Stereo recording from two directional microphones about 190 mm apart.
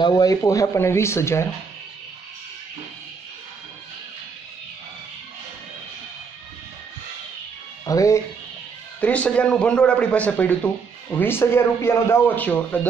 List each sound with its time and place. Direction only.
0.0 s speech: 20° left (ahead or behind)
7.8 s speech: 15° left (ahead or behind)
9.0 s speech: 5° left (ahead or behind)